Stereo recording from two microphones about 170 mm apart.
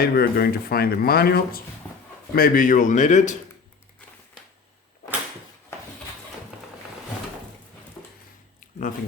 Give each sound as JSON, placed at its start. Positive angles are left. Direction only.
{"t": 0.0, "sound": "a man's voice", "side_deg": 65}